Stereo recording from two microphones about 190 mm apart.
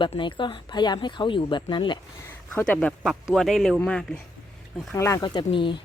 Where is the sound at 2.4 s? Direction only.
5° left (ahead or behind).